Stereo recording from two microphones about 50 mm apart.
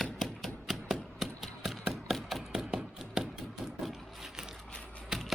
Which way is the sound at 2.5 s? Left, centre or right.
Centre.